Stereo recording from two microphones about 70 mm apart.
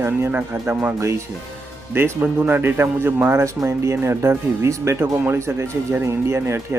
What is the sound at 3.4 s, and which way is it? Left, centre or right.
Speech, right.